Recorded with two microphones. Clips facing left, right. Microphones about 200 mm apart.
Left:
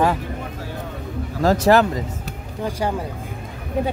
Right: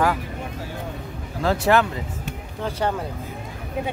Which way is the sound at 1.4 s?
40° left (ahead or behind).